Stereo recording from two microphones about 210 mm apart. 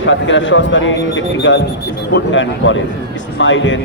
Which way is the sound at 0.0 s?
65° left (ahead or behind).